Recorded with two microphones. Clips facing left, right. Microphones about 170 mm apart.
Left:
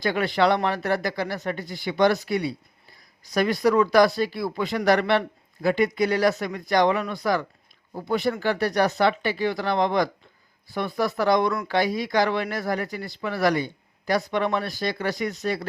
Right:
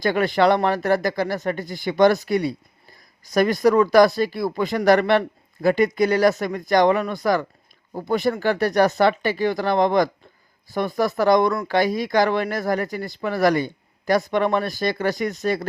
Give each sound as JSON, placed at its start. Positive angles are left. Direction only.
{"t": 0.0, "sound": "speech", "side_deg": -45}